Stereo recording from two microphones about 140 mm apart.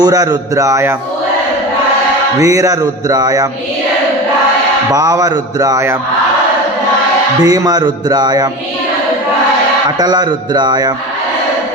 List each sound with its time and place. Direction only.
0.0 s speech: 30° right (ahead or behind)
2.4 s speech: 25° right (ahead or behind)
4.9 s speech: 25° right (ahead or behind)
7.4 s speech: 30° right (ahead or behind)
10.0 s a man's voice: 30° right (ahead or behind)